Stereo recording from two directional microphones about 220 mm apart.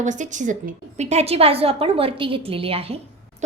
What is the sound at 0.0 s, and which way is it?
A woman's voice, 35° right (ahead or behind).